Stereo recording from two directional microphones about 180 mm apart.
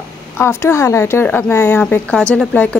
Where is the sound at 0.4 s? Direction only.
15° left (ahead or behind).